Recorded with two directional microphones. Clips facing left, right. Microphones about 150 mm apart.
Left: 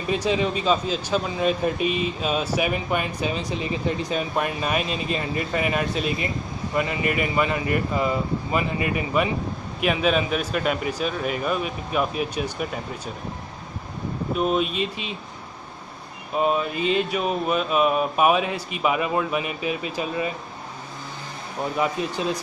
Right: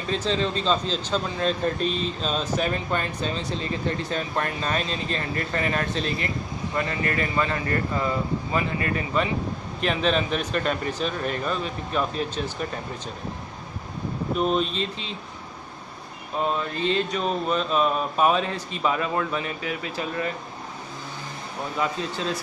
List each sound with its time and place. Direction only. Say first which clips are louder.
0.1 s a man's voice: left 2 dB; 15° left (ahead or behind)
14.4 s a man's voice: left 2 dB; 10° left (ahead or behind)
16.3 s a man's voice: left 4 dB; 15° left (ahead or behind)
21.7 s a man's voice: left 2 dB; 15° left (ahead or behind)